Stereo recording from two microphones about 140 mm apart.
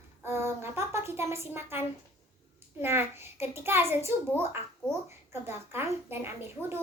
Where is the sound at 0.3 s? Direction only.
20° right (ahead or behind).